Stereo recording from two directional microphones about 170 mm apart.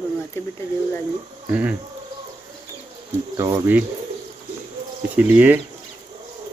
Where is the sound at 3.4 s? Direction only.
15° right (ahead or behind).